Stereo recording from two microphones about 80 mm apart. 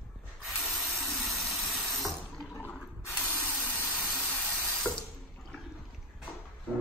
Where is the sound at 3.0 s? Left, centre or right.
Left.